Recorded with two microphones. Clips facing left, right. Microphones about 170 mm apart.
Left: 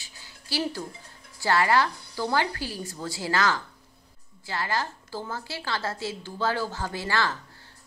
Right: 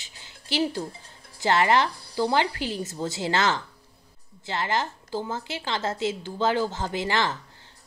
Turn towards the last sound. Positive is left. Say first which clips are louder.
# right 2 dB
turn(degrees=-20)  # may be behind; listen again after turning